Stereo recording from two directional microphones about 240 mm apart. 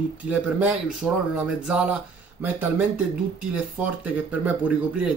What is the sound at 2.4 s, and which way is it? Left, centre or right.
Speech, centre.